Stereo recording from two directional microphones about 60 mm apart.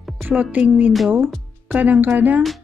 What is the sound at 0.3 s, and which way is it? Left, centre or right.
A woman's voice, right.